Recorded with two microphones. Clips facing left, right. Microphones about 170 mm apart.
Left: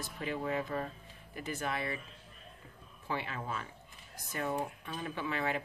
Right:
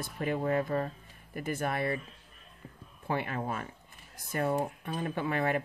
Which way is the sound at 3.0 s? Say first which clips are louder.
Right 5 dB; 50° right (ahead or behind).